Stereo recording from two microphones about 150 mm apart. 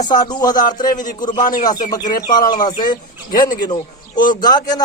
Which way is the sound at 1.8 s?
25° left (ahead or behind).